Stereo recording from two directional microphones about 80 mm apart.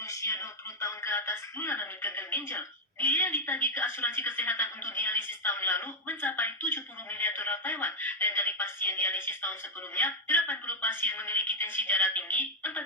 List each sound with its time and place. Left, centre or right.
0.0 s speech: left